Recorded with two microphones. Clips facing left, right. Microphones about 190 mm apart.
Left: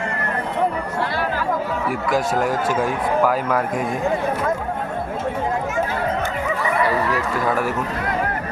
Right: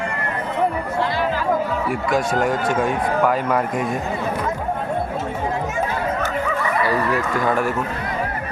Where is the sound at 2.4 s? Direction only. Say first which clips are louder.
Right 1 dB; 5° left (ahead or behind).